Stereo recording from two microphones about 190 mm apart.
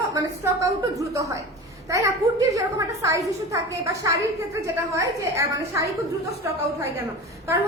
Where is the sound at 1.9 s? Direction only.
15° right (ahead or behind).